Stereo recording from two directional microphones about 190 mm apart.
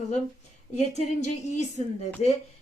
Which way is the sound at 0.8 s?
35° left (ahead or behind).